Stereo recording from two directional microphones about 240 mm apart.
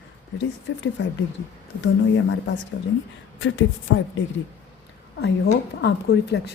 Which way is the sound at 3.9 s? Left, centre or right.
Left.